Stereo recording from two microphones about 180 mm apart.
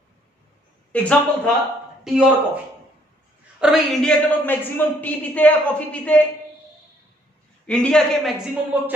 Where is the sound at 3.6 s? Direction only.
Centre (ahead or behind).